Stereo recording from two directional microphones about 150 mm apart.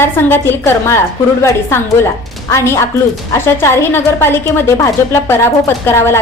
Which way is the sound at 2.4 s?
20° left (ahead or behind).